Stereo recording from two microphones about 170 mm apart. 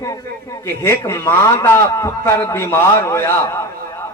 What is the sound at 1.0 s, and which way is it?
A man's voice, 15° left (ahead or behind).